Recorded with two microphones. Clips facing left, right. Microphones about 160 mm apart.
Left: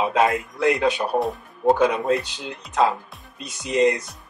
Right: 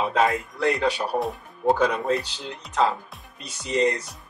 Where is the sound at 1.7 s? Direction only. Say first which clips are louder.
Left 3 dB; 15° left (ahead or behind).